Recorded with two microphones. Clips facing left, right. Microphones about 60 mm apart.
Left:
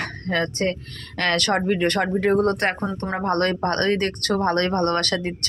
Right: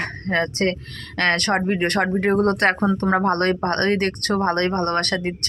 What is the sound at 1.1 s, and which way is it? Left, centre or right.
Speech, right.